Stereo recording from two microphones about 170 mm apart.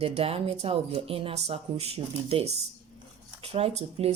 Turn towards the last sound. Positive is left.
turn(degrees=-35)  # may be behind; listen again after turning